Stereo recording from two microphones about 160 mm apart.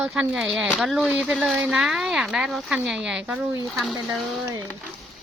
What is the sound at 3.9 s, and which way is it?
Speech, 25° right (ahead or behind).